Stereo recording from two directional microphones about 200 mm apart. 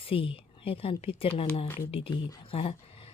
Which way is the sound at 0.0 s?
25° left (ahead or behind).